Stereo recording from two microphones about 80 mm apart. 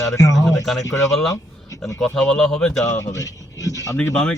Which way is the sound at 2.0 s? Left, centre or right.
Centre.